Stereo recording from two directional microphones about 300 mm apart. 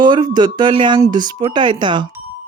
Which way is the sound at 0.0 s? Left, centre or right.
Centre.